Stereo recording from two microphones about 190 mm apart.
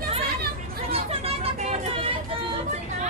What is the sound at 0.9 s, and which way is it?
Chatter, 30° right (ahead or behind).